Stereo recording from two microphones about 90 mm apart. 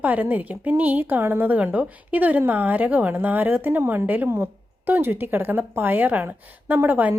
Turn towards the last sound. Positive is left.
turn(degrees=-20)  # may be behind; listen again after turning